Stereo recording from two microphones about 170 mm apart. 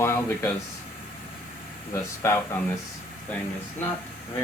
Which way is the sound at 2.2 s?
15° left (ahead or behind).